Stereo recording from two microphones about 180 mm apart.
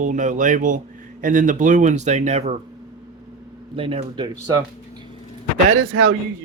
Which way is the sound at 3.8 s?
30° right (ahead or behind).